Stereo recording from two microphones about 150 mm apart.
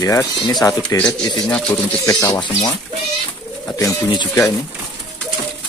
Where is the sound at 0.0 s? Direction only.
25° left (ahead or behind).